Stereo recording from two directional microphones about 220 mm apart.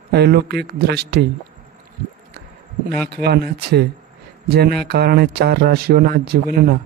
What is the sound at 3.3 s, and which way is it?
Speech, 45° right (ahead or behind).